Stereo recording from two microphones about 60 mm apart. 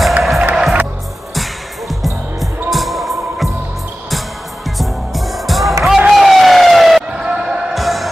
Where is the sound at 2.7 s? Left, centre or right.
Centre.